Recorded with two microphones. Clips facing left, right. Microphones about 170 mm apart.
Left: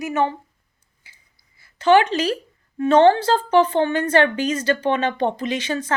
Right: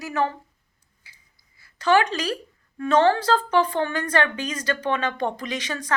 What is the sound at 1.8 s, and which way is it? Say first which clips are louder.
Speech: left 5 dB; 25° left (ahead or behind).